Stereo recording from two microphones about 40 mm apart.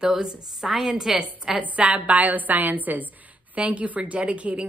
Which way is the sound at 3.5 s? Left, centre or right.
Right.